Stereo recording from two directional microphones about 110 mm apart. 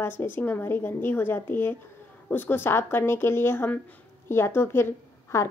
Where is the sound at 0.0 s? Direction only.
20° left (ahead or behind).